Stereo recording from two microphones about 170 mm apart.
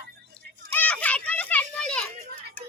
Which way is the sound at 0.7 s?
10° left (ahead or behind).